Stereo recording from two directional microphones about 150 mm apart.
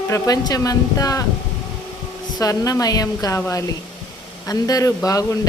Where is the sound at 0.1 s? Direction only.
25° left (ahead or behind).